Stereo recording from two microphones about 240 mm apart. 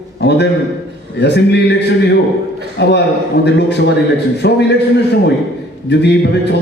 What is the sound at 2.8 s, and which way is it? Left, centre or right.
A man's voice, left.